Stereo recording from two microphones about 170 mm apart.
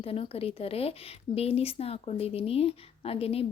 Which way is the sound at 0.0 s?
35° left (ahead or behind).